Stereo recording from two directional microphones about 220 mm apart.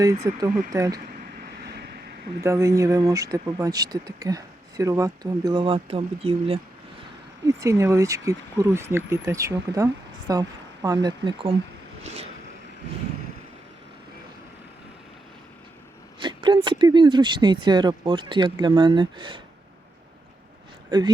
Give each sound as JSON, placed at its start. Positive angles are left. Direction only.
{"t": 0.3, "sound": "speech", "side_deg": -15}
{"t": 2.4, "sound": "speech", "side_deg": -15}
{"t": 7.4, "sound": "speech", "side_deg": -15}
{"t": 12.0, "sound": "a sound", "side_deg": -30}
{"t": 16.2, "sound": "speech", "side_deg": -20}
{"t": 20.9, "sound": "speech", "side_deg": -20}